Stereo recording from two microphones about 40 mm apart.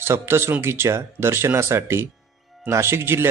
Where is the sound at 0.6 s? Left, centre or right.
Right.